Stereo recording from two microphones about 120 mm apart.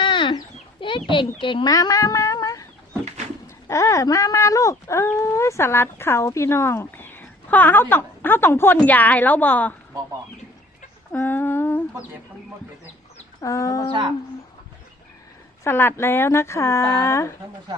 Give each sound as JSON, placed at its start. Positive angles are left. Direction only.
{"t": 0.0, "sound": "chicken", "side_deg": 45}
{"t": 1.4, "sound": "speech", "side_deg": 45}
{"t": 1.7, "sound": "speech", "side_deg": 30}
{"t": 11.1, "sound": "a sound", "side_deg": 15}
{"t": 13.4, "sound": "speech", "side_deg": 25}
{"t": 15.6, "sound": "speech", "side_deg": 20}